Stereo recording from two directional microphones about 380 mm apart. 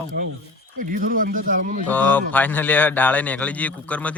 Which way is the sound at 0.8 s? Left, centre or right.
Right.